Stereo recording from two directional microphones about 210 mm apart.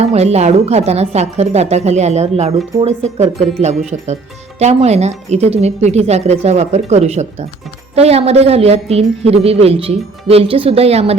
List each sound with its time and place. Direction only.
0.0 s a woman's voice: 30° right (ahead or behind)